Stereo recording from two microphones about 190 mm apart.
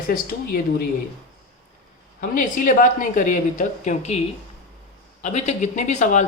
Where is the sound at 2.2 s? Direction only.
45° left (ahead or behind).